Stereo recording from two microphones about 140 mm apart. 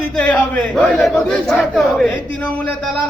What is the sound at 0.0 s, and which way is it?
Speech, 10° left (ahead or behind).